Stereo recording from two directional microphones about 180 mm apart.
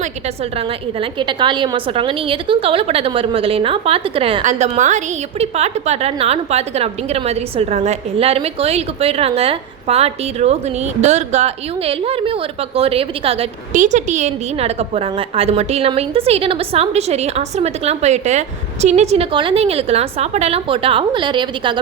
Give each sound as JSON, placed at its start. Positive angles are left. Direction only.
{"t": 0.9, "sound": "a woman's voice", "side_deg": -25}
{"t": 4.4, "sound": "a woman's voice", "side_deg": -40}